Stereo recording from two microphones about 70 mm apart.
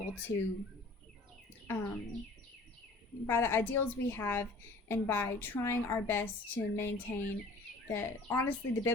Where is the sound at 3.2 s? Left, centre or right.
Left.